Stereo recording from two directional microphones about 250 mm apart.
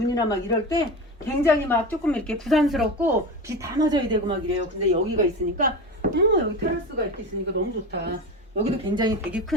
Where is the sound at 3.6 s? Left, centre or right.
Centre.